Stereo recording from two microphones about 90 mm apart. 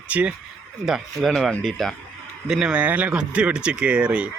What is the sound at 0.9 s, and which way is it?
Speech, centre (ahead or behind).